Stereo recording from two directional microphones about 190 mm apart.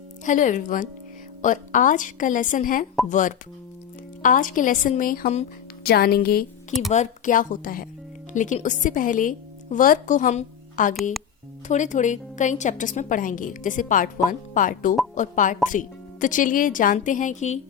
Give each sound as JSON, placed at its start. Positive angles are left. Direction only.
{"t": 0.3, "sound": "a woman's voice", "side_deg": 40}
{"t": 5.8, "sound": "speech", "side_deg": 55}
{"t": 6.9, "sound": "a woman's voice", "side_deg": 40}